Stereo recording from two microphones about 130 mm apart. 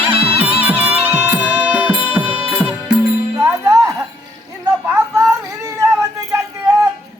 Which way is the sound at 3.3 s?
25° right (ahead or behind).